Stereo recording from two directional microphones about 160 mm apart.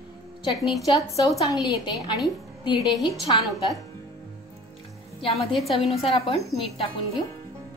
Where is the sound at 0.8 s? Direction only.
20° left (ahead or behind).